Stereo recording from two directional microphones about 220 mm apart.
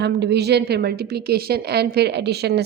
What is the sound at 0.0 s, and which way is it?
A woman's voice, 50° right (ahead or behind).